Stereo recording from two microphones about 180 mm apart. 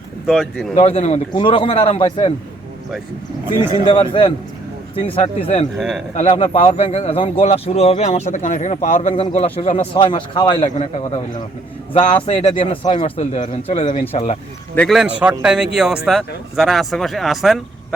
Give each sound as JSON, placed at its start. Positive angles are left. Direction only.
{"t": 0.3, "sound": "speech", "side_deg": 0}
{"t": 0.8, "sound": "a man's voice", "side_deg": 35}
{"t": 3.8, "sound": "a man's voice", "side_deg": 30}
{"t": 5.7, "sound": "speech", "side_deg": 0}
{"t": 6.1, "sound": "speech", "side_deg": 35}
{"t": 14.8, "sound": "speech", "side_deg": 0}